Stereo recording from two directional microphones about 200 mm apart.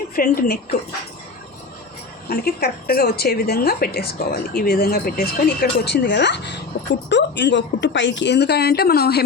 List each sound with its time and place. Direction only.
0.2 s a woman's voice: 45° left (ahead or behind)
2.3 s a woman's voice: 50° left (ahead or behind)